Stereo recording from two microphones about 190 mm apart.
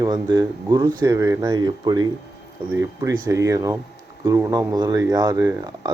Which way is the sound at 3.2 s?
15° right (ahead or behind).